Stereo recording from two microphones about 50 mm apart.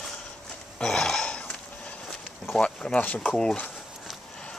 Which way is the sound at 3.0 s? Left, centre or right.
Left.